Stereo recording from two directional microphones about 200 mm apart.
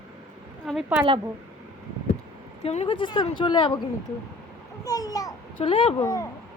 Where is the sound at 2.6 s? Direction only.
30° left (ahead or behind).